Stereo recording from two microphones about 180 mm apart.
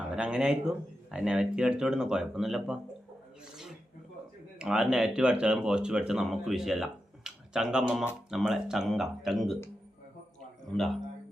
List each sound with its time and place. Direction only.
0.2 s speech: 5° right (ahead or behind)
4.5 s speech: 5° right (ahead or behind)